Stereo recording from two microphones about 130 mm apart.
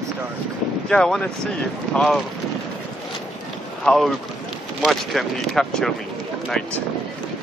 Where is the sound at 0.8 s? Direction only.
5° left (ahead or behind).